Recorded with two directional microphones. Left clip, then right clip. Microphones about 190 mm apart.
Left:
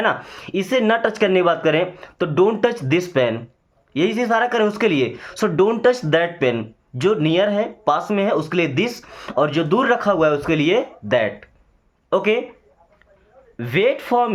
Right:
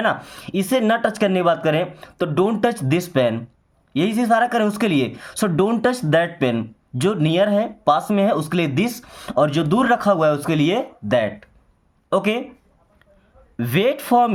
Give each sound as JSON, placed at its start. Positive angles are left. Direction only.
{"t": 0.0, "sound": "speech", "side_deg": -35}
{"t": 13.6, "sound": "speech", "side_deg": -45}